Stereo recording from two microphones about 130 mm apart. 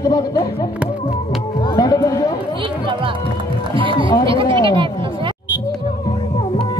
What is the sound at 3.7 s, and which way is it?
Music, 40° right (ahead or behind).